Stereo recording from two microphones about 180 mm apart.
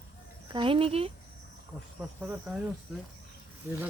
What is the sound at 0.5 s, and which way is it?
Speech, 30° right (ahead or behind).